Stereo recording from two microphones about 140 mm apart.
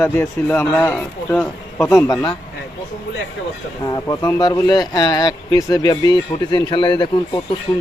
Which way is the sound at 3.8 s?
25° left (ahead or behind).